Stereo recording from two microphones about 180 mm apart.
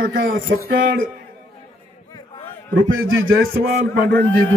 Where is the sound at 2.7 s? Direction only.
90° right.